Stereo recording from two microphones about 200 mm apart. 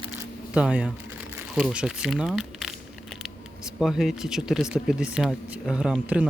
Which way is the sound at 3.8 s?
Centre (ahead or behind).